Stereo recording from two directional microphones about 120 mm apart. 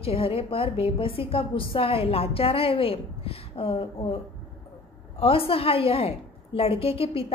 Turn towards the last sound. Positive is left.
turn(degrees=50)  # may be behind; listen again after turning